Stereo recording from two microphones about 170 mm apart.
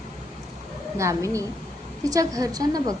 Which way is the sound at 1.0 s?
20° right (ahead or behind).